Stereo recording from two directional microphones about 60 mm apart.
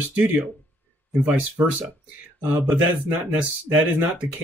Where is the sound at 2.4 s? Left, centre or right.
Right.